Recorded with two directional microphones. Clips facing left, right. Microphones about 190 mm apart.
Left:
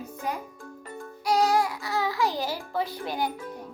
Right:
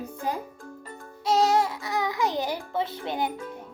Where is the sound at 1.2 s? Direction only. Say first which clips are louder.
Right 1 dB; 25° right (ahead or behind).